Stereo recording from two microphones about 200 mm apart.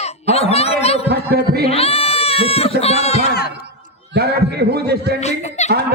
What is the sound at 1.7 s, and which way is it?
Speech, 30° left (ahead or behind).